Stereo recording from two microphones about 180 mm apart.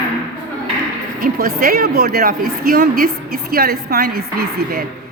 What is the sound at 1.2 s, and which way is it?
A woman's voice, 55° right (ahead or behind).